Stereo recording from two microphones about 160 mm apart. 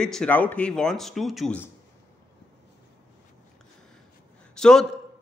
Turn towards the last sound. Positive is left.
turn(degrees=5)  # may be behind; listen again after turning